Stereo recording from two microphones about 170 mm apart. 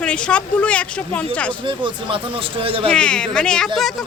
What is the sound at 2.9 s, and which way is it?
Speech, 5° left (ahead or behind).